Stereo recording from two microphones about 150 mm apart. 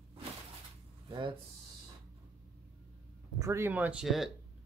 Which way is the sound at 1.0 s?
35° right (ahead or behind).